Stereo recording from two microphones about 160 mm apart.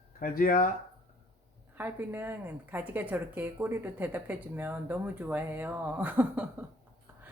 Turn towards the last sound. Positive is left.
turn(degrees=-10)  # may be behind; listen again after turning